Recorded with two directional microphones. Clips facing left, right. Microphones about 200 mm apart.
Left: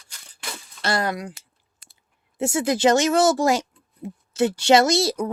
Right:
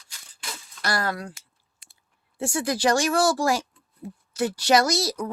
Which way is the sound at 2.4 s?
25° left (ahead or behind).